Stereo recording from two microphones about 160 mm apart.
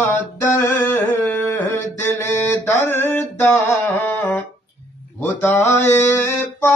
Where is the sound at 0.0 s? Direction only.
10° left (ahead or behind).